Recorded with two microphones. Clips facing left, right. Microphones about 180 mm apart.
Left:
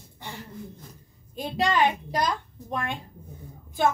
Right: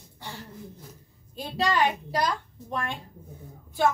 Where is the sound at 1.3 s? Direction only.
20° left (ahead or behind).